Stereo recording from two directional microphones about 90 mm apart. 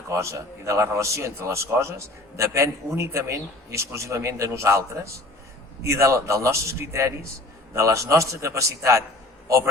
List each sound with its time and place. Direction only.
0.1 s a man's voice: 35° right (ahead or behind)